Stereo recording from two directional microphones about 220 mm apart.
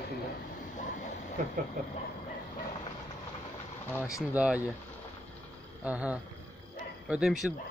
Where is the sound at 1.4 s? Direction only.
35° right (ahead or behind).